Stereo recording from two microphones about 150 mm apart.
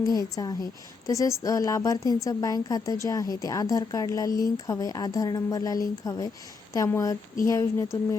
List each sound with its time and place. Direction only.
0.0 s speech: 25° left (ahead or behind)